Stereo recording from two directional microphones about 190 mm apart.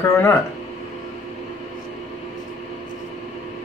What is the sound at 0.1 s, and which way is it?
Speech, 15° left (ahead or behind).